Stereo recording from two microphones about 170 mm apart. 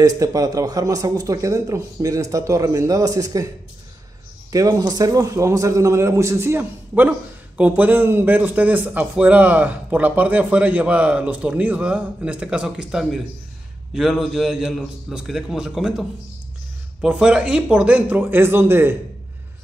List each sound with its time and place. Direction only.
0.0 s speech: 20° right (ahead or behind)
4.5 s a man's voice: 20° right (ahead or behind)